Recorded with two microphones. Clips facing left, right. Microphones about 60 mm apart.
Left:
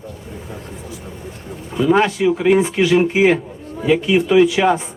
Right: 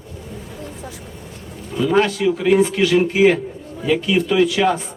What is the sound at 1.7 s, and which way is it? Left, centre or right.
A man's voice, centre.